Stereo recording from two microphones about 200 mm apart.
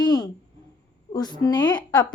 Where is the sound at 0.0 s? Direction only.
20° left (ahead or behind).